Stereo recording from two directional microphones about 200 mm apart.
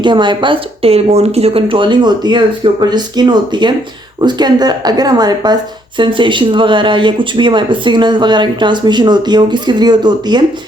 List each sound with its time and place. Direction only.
0.0 s speech: 25° right (ahead or behind)